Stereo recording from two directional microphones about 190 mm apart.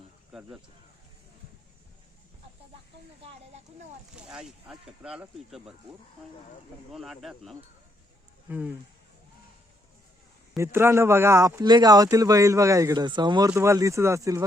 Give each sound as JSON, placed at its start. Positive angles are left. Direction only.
{"t": 4.1, "sound": "speech", "side_deg": -5}
{"t": 6.9, "sound": "speech", "side_deg": 0}
{"t": 10.6, "sound": "speech", "side_deg": -15}